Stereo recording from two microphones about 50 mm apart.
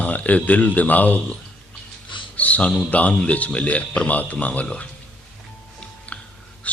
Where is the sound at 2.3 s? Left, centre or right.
Left.